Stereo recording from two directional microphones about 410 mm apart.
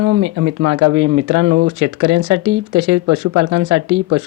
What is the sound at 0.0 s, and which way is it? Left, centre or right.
Speech, right.